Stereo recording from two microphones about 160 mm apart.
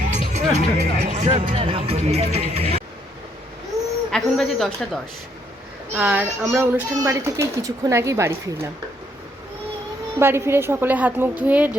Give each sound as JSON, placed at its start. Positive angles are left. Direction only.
{"t": 0.1, "sound": "speech", "side_deg": -45}
{"t": 3.7, "sound": "a sound", "side_deg": -20}
{"t": 4.1, "sound": "speech", "side_deg": 0}
{"t": 6.0, "sound": "speech", "side_deg": -10}
{"t": 10.2, "sound": "speech", "side_deg": -15}